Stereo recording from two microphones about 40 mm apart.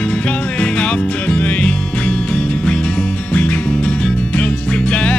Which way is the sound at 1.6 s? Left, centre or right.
Left.